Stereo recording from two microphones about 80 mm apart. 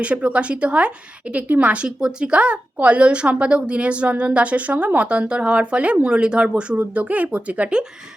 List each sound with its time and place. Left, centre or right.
0.0 s a woman's voice: centre